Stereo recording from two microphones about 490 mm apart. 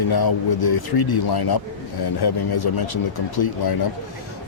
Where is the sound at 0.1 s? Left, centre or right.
Left.